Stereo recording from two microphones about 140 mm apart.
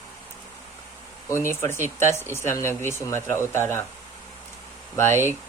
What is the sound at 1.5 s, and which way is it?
Speech, 20° left (ahead or behind).